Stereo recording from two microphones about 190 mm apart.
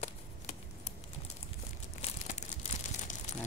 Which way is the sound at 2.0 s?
35° left (ahead or behind).